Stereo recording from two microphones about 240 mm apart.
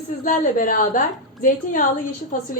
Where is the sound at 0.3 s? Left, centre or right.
Left.